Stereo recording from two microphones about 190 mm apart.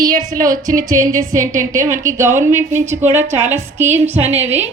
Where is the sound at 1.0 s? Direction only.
15° right (ahead or behind).